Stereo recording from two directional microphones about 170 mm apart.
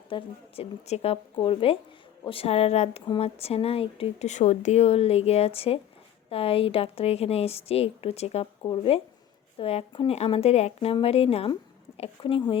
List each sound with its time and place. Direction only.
0.1 s speech: 35° left (ahead or behind)